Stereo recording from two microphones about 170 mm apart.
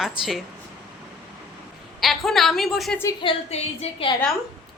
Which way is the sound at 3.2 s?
35° left (ahead or behind).